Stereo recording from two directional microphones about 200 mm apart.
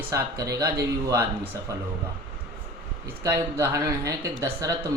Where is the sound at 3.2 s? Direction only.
15° right (ahead or behind).